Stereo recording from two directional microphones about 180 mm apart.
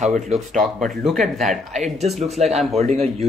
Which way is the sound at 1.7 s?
40° right (ahead or behind).